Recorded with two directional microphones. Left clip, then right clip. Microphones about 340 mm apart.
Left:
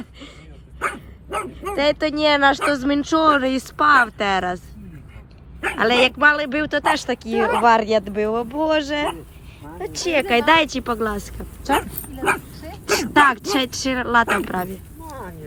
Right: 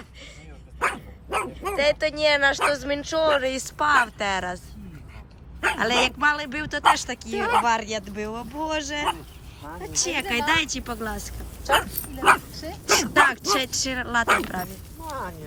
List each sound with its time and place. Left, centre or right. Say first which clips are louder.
1.3 s dog: left 1 dB; centre
1.7 s a man's voice: left 3 dB; centre
15.1 s clip-clop: right 3 dB; centre